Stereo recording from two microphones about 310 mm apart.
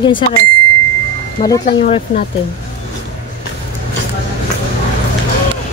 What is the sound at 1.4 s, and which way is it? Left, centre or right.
Speech, centre.